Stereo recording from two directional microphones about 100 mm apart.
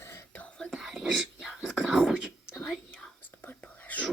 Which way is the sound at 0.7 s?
Centre (ahead or behind).